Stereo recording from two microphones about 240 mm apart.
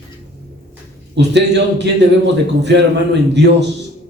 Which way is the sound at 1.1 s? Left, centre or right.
Right.